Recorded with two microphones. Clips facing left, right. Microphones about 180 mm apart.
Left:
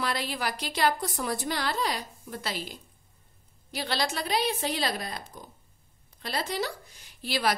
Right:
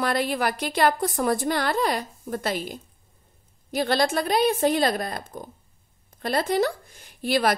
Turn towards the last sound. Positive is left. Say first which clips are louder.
# right 6 dB
turn(degrees=-50)  # may be behind; listen again after turning